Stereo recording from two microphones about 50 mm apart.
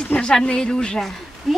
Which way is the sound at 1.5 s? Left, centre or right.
Centre.